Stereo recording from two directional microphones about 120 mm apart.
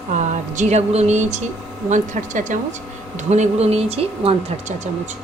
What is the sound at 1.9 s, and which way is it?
Speech, 90° right.